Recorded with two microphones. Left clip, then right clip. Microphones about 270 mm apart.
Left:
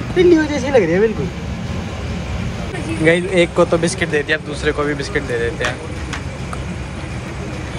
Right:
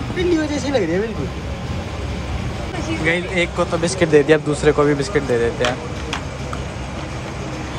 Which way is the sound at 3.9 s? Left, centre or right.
Centre.